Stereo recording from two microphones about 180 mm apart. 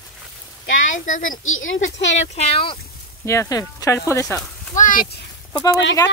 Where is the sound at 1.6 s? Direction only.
90° left.